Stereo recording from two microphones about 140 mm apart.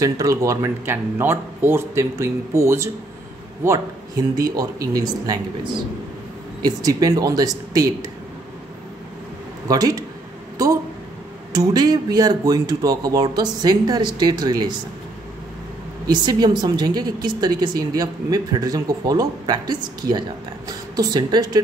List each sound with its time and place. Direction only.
0.0 s a woman's voice: 25° right (ahead or behind)
9.7 s a woman's voice: 25° right (ahead or behind)
11.5 s a woman's voice: 30° right (ahead or behind)
16.1 s a woman's voice: 30° right (ahead or behind)